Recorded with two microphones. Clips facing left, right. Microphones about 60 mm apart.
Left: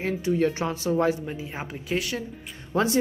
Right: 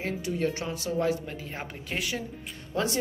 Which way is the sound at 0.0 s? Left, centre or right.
Left.